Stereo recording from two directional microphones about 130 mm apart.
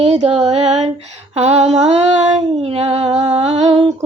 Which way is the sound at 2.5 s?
50° right (ahead or behind).